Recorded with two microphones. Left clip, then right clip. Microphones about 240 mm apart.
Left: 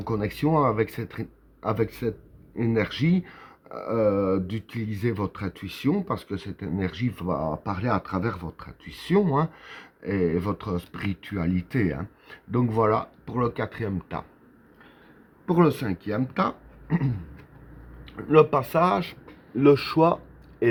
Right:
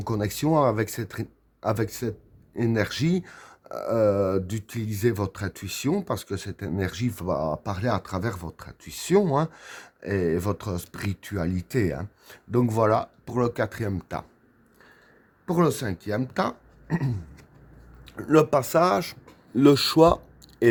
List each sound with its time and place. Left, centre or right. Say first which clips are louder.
0.0 s speech: even; right
15.4 s speech: left 2 dB; right